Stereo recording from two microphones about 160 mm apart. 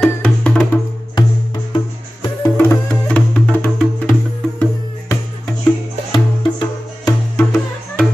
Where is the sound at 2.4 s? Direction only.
10° left (ahead or behind).